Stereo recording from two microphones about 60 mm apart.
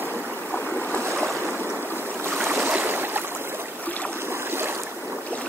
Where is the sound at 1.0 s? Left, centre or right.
Right.